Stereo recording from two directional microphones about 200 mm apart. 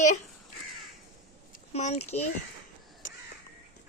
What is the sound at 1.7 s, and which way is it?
Speech, 35° left (ahead or behind).